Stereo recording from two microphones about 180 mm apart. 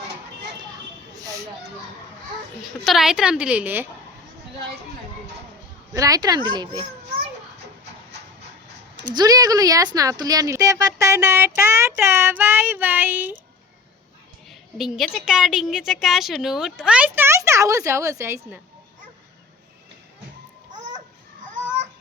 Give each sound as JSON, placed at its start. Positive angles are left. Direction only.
{"t": 2.8, "sound": "a woman's voice", "side_deg": 0}
{"t": 5.9, "sound": "a child's voice", "side_deg": -20}
{"t": 9.1, "sound": "speech", "side_deg": -20}
{"t": 14.8, "sound": "a woman's voice", "side_deg": 0}
{"t": 20.7, "sound": "a sound", "side_deg": -45}